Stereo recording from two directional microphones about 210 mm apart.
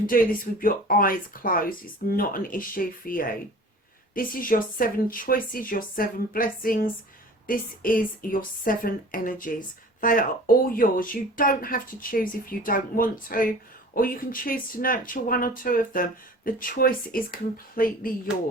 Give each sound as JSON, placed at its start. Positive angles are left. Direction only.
{"t": 0.1, "sound": "speech", "side_deg": 40}